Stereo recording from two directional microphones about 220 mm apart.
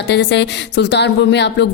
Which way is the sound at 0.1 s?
50° left (ahead or behind).